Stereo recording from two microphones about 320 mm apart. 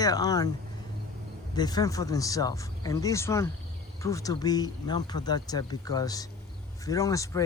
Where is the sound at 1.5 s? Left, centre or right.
Centre.